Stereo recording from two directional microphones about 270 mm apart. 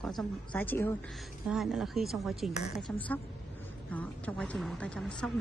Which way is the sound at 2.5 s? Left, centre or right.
Left.